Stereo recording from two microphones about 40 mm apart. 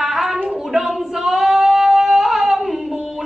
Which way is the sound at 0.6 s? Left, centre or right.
Centre.